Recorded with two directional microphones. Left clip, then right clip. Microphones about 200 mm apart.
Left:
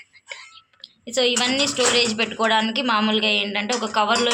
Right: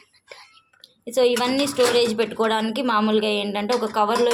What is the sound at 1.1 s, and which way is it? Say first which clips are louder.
Speech: right 1 dB; 50° right (ahead or behind).